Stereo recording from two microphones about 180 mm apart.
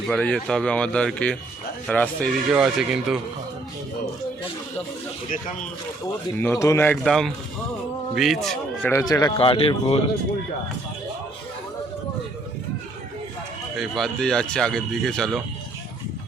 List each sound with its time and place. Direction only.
0.1 s a man's voice: 5° left (ahead or behind)
2.5 s speech: 5° right (ahead or behind)
6.4 s a man's voice: 15° left (ahead or behind)
8.9 s speech: 20° left (ahead or behind)
13.7 s speech: centre (ahead or behind)